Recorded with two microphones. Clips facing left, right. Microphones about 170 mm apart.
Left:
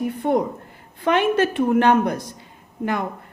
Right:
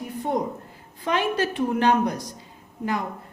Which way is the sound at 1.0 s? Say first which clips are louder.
Left 6 dB; 60° left (ahead or behind).